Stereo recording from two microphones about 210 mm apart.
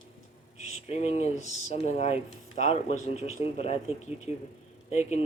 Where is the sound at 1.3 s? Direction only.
40° right (ahead or behind).